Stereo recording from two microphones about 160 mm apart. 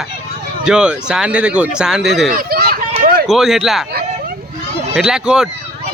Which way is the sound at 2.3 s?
70° right (ahead or behind).